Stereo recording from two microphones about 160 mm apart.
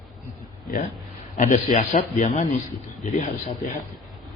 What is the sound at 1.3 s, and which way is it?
A man's voice, 50° left (ahead or behind).